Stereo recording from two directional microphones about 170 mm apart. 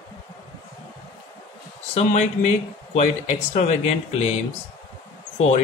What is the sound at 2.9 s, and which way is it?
Speech, 40° left (ahead or behind).